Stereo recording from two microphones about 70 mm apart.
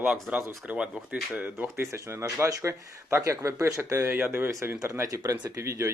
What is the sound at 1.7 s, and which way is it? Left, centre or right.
Speech, right.